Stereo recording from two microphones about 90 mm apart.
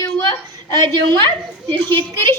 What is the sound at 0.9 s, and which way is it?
A woman's voice, 55° right (ahead or behind).